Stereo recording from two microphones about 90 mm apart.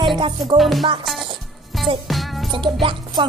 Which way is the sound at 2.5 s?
65° right (ahead or behind).